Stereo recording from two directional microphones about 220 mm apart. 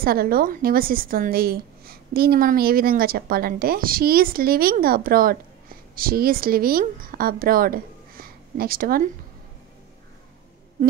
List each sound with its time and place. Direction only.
0.0 s a woman's voice: 45° right (ahead or behind)